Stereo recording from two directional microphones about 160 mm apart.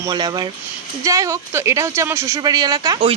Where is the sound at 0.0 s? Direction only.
25° right (ahead or behind).